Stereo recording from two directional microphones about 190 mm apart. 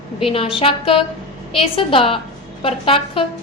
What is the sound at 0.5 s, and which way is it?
A woman's voice, 30° left (ahead or behind).